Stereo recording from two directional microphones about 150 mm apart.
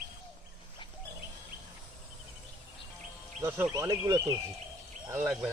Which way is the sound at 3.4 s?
15° right (ahead or behind).